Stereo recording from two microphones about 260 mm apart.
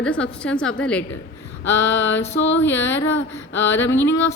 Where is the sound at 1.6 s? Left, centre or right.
Centre.